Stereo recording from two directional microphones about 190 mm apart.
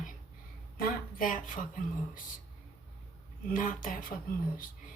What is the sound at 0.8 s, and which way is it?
A woman's voice, 45° left (ahead or behind).